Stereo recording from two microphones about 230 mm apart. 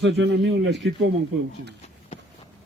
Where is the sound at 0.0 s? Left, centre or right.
Right.